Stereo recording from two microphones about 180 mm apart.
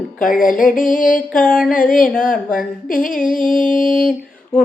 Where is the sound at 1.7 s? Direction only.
50° left (ahead or behind).